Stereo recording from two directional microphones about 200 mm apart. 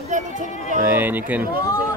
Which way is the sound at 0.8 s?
10° right (ahead or behind).